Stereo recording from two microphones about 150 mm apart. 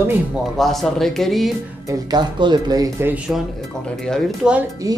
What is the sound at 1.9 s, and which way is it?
Speech, 25° right (ahead or behind).